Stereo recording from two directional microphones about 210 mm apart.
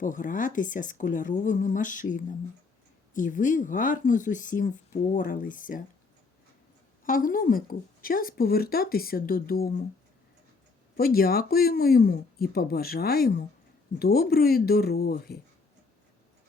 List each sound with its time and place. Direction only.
0.0 s speech: 40° left (ahead or behind)
7.0 s speech: 40° left (ahead or behind)
10.9 s speech: 45° left (ahead or behind)